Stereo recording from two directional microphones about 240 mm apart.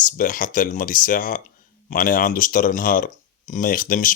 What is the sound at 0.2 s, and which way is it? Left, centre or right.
Speech, left.